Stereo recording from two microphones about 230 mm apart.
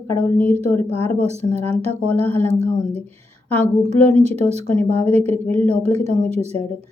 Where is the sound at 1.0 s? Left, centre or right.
Right.